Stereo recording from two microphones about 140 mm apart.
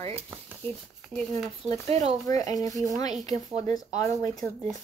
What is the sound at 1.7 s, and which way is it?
Rub, 55° right (ahead or behind).